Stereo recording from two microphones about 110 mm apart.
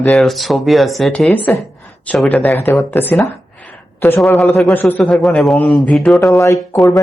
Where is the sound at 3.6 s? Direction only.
15° left (ahead or behind).